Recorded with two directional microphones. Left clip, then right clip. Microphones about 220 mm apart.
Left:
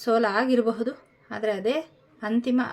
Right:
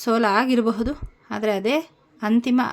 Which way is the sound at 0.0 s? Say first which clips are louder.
Right 3 dB; 40° right (ahead or behind).